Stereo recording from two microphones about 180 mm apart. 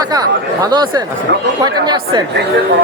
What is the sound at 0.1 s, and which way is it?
Speech, 20° right (ahead or behind).